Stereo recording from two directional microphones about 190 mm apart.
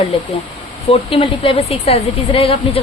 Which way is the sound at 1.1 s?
30° left (ahead or behind).